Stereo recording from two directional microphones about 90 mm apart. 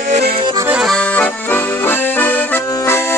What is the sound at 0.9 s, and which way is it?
Accordion, 15° left (ahead or behind).